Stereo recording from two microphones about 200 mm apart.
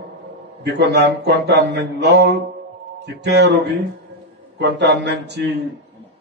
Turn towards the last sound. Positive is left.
turn(degrees=-60)  # may be behind; listen again after turning